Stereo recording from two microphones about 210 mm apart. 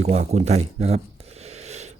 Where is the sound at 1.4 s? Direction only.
30° right (ahead or behind).